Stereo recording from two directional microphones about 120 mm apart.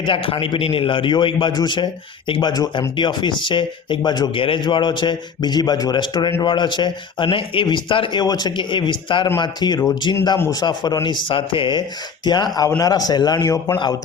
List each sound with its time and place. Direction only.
0.0 s a man's voice: 45° left (ahead or behind); by 13.7 s 30° left (ahead or behind)